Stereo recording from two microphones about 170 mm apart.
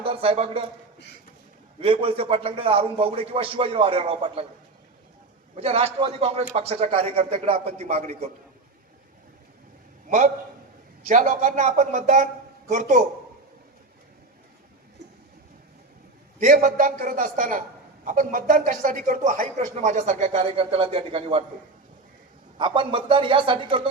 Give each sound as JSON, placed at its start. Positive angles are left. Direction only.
{"t": 0.0, "sound": "a man's voice", "side_deg": -35}
{"t": 1.8, "sound": "a man's voice", "side_deg": -30}
{"t": 5.5, "sound": "a man's voice", "side_deg": -35}
{"t": 10.1, "sound": "a man's voice", "side_deg": -45}
{"t": 16.4, "sound": "speech", "side_deg": -50}
{"t": 22.5, "sound": "a man's voice", "side_deg": -30}